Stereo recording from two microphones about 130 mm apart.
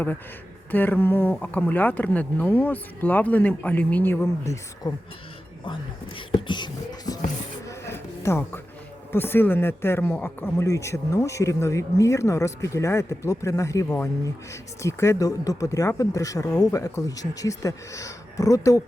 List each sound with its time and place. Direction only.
0.7 s speech: 15° left (ahead or behind)
4.8 s speech: 35° left (ahead or behind)
7.7 s a sound: 20° left (ahead or behind)
9.1 s speech: 15° left (ahead or behind)